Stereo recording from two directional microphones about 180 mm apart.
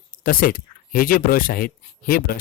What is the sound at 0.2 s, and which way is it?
Speech, 50° left (ahead or behind).